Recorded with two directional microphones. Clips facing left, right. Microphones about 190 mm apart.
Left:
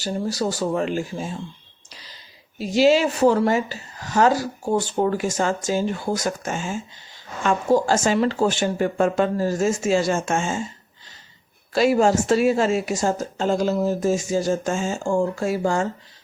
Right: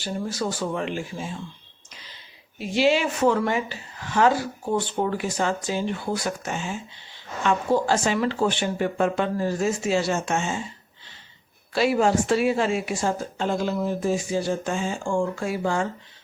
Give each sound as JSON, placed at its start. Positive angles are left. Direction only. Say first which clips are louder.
{"t": 0.0, "sound": "speech", "louder": "left 4 dB", "side_deg": 40}
{"t": 11.7, "sound": "speech", "louder": "left 3 dB", "side_deg": 45}